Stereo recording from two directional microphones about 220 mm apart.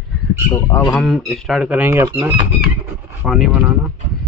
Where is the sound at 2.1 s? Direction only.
20° right (ahead or behind).